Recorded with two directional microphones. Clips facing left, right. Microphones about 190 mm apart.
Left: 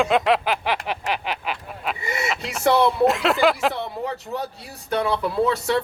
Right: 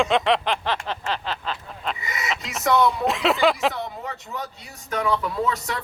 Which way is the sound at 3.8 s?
35° left (ahead or behind).